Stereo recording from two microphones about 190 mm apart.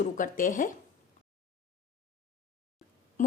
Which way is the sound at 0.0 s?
45° left (ahead or behind).